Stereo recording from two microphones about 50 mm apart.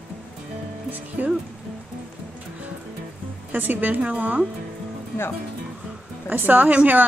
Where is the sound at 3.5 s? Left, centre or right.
Right.